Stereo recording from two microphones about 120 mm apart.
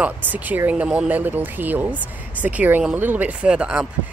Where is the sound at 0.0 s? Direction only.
15° right (ahead or behind).